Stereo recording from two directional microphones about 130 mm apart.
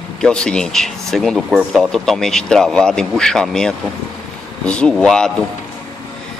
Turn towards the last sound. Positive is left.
turn(degrees=5)  # may be behind; listen again after turning